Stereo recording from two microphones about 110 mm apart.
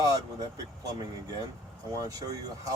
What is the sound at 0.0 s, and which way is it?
Speech, 35° right (ahead or behind).